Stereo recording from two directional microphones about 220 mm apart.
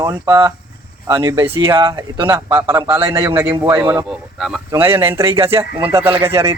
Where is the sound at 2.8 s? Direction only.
20° right (ahead or behind).